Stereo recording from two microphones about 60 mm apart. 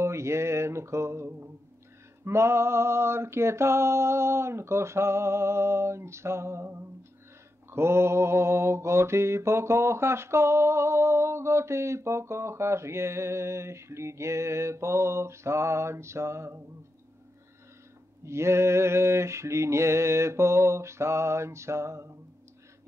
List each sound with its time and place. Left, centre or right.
0.0 s mantra: right
18.2 s mantra: right